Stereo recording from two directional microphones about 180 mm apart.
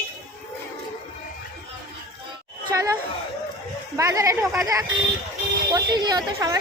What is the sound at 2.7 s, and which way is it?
A woman's voice, 20° right (ahead or behind).